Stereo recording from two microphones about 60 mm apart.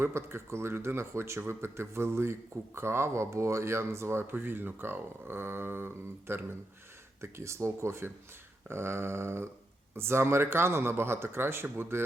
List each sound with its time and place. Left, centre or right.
0.0 s speech: right